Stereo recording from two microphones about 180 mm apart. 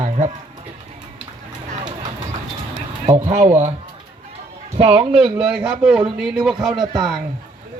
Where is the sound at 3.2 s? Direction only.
40° right (ahead or behind).